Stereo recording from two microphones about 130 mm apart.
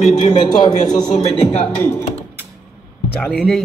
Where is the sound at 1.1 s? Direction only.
60° left (ahead or behind).